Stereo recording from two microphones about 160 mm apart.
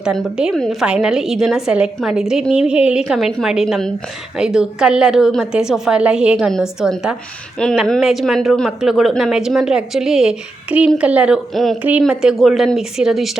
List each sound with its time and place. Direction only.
0.0 s speech: 5° right (ahead or behind)